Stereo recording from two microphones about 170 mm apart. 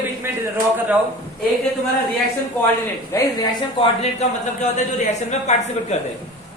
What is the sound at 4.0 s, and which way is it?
A man's voice, 40° left (ahead or behind).